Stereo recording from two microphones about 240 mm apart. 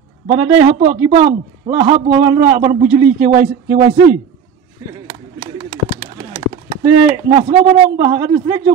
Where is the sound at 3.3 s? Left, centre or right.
Right.